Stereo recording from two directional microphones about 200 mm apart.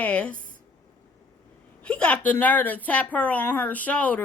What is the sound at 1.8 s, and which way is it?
A woman's voice, 5° left (ahead or behind).